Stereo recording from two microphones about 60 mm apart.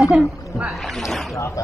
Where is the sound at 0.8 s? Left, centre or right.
Centre.